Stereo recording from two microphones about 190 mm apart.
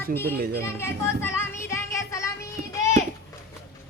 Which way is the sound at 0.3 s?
55° right (ahead or behind).